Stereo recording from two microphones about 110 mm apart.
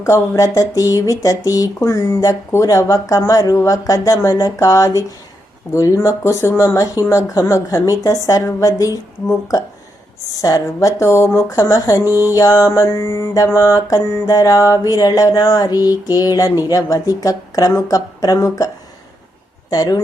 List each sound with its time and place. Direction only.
0.0 s mantra: 30° left (ahead or behind)
5.7 s speech: 30° left (ahead or behind)
8.3 s mantra: 30° left (ahead or behind)
10.4 s speech: 30° left (ahead or behind)
11.4 s mantra: 30° left (ahead or behind)
19.7 s mantra: 35° left (ahead or behind)